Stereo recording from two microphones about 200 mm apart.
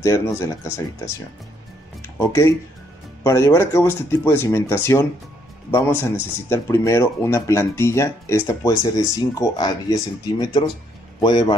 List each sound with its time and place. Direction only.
0.0 s speech: 15° left (ahead or behind)
2.0 s music: 15° left (ahead or behind)
3.3 s a man's voice: 15° left (ahead or behind)